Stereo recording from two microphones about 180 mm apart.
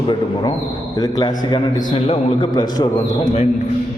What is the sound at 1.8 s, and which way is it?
A man's voice, 40° left (ahead or behind).